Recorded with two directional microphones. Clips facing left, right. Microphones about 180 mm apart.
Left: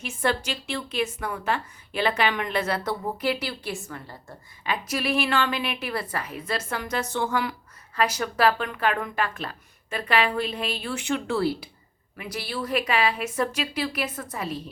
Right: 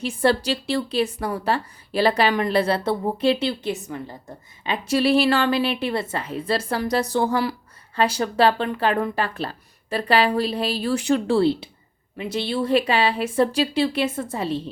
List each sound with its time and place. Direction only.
0.0 s speech: 35° right (ahead or behind)